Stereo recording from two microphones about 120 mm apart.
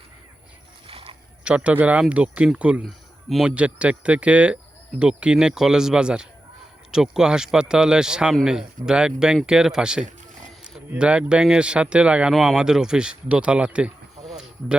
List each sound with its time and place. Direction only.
0.9 s biting: 50° right (ahead or behind)
1.5 s a man's voice: 10° right (ahead or behind)
14.3 s a sound: 5° right (ahead or behind)